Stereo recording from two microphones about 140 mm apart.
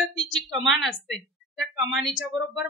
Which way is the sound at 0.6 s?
Centre (ahead or behind).